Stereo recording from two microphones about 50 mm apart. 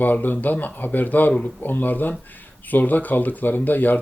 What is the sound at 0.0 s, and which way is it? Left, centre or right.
Speech, left.